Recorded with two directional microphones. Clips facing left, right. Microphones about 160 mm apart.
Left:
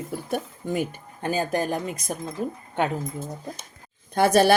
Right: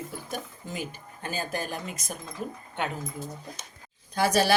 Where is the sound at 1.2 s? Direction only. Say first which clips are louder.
Left 8 dB; 20° left (ahead or behind).